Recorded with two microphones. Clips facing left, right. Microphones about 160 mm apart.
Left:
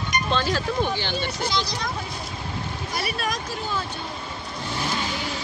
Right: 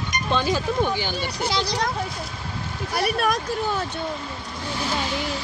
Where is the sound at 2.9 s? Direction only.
55° right (ahead or behind).